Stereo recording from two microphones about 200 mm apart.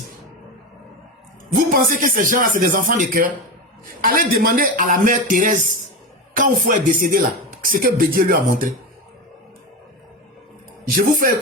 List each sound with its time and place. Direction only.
1.5 s a man's voice: 45° right (ahead or behind)
10.9 s a man's voice: 45° right (ahead or behind)